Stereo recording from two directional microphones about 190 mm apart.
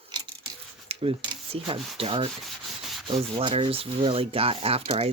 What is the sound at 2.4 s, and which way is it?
Sanding, centre (ahead or behind).